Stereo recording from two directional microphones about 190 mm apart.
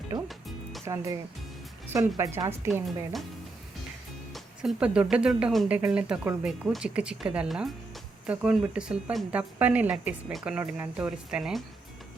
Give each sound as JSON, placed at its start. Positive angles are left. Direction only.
{"t": 0.3, "sound": "music", "side_deg": 0}
{"t": 1.9, "sound": "speech", "side_deg": -15}
{"t": 2.8, "sound": "speech", "side_deg": 0}
{"t": 4.6, "sound": "speech", "side_deg": -5}